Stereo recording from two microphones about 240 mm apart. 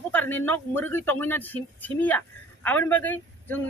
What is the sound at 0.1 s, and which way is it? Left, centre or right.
Speech, centre.